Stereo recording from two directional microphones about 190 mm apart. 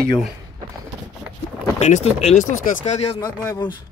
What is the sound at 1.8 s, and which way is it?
Speech, 35° left (ahead or behind).